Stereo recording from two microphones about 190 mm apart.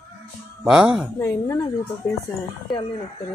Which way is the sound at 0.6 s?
5° right (ahead or behind).